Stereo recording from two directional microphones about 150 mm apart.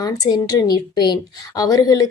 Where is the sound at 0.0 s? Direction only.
25° left (ahead or behind).